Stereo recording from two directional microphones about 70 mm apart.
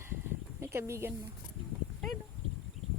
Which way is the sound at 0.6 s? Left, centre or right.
Right.